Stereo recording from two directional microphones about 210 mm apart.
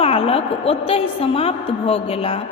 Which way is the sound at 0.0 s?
25° left (ahead or behind).